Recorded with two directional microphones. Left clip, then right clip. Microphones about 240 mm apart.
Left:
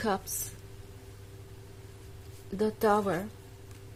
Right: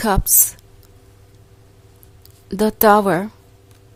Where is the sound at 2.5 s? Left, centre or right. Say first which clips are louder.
Right 13 dB; right.